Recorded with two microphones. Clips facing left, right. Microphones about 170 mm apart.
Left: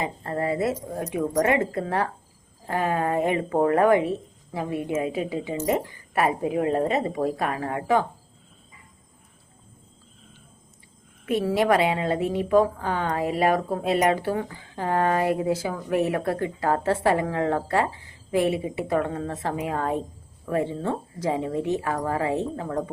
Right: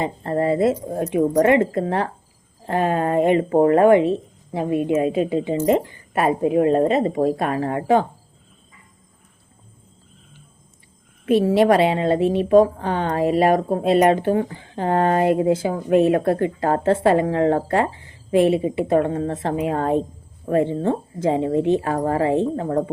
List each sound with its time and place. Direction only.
0.0 s speech: 30° right (ahead or behind)
11.5 s speech: 25° right (ahead or behind)